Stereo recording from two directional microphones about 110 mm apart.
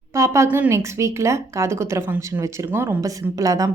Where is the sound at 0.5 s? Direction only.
25° right (ahead or behind).